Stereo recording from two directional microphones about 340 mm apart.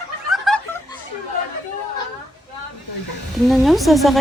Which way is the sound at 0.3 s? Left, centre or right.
Centre.